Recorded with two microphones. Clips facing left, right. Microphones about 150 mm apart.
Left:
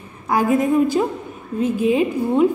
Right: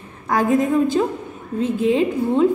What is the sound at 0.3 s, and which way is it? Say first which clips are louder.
A woman's voice: even; 10° left (ahead or behind).